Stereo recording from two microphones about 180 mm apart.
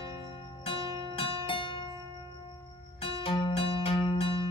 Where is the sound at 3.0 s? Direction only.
30° left (ahead or behind).